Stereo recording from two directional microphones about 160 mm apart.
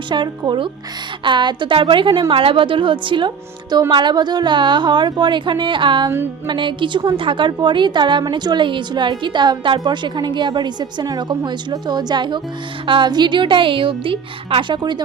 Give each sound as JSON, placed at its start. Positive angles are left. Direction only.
{"t": 0.1, "sound": "a woman's voice", "side_deg": -30}